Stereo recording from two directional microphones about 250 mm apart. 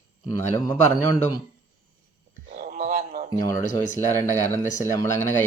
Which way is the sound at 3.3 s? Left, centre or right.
Centre.